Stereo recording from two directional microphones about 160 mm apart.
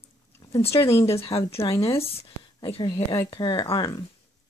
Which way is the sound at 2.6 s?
30° left (ahead or behind).